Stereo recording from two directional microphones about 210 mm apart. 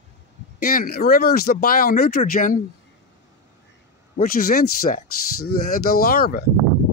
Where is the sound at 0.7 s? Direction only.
40° left (ahead or behind).